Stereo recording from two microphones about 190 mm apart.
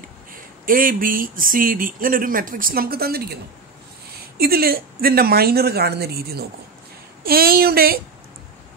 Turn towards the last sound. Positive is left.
turn(degrees=-55)  # may be behind; listen again after turning